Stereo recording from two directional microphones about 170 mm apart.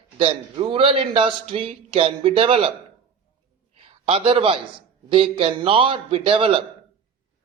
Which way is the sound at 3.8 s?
35° right (ahead or behind).